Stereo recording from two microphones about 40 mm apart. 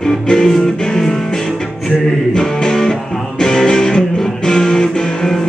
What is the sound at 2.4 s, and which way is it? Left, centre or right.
Music, centre.